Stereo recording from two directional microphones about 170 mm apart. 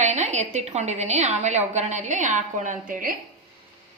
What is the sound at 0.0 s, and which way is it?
A woman's voice, 45° right (ahead or behind).